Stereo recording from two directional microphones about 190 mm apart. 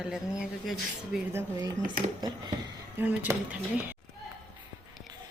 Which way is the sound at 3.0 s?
10° right (ahead or behind).